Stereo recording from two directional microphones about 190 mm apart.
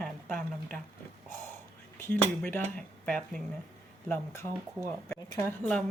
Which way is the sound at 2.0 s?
10° left (ahead or behind).